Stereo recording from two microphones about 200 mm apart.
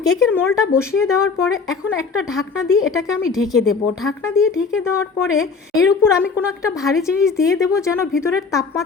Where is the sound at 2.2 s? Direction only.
Centre (ahead or behind).